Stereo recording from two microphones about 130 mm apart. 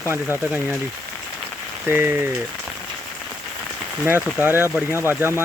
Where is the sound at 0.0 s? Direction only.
20° right (ahead or behind).